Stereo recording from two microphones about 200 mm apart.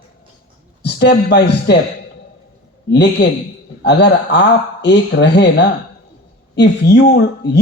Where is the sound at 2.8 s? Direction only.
55° left (ahead or behind).